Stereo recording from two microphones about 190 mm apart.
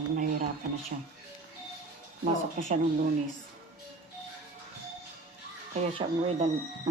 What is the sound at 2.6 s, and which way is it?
Speech, 45° right (ahead or behind).